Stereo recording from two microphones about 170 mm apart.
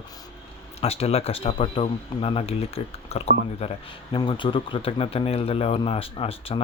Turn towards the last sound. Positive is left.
turn(degrees=35)  # may be behind; listen again after turning